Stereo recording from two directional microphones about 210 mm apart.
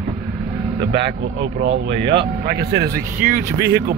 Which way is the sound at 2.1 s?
50° right (ahead or behind).